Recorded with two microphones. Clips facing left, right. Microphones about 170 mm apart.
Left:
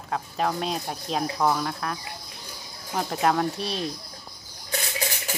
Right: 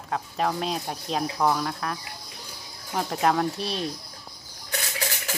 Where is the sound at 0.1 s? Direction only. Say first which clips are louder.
Even; centre (ahead or behind).